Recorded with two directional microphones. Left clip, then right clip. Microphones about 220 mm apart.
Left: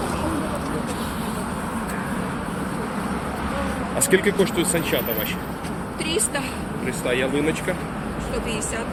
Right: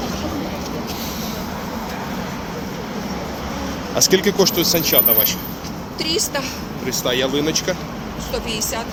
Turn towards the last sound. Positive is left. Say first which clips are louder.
# right 3 dB
turn(degrees=-25)  # may be behind; listen again after turning